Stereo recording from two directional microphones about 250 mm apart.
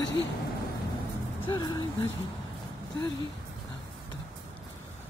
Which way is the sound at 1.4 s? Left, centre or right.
Centre.